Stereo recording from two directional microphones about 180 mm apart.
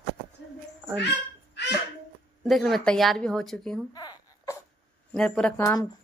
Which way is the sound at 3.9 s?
25° left (ahead or behind).